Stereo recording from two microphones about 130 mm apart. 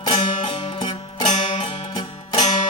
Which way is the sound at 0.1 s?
45° left (ahead or behind).